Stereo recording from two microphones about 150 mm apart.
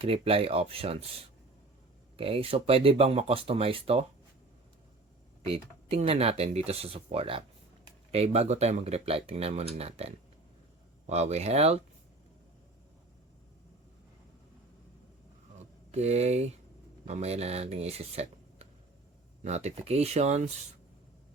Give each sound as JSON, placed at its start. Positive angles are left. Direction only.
{"t": 0.0, "sound": "speech", "side_deg": -40}
{"t": 2.1, "sound": "speech", "side_deg": -40}
{"t": 5.5, "sound": "speech", "side_deg": -40}
{"t": 15.5, "sound": "a sound", "side_deg": -45}
{"t": 17.1, "sound": "speech", "side_deg": -45}